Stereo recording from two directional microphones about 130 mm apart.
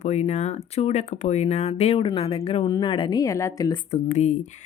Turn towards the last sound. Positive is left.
turn(degrees=60)  # may be behind; listen again after turning